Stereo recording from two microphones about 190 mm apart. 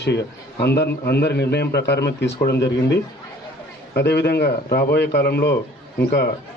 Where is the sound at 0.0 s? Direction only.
60° left (ahead or behind).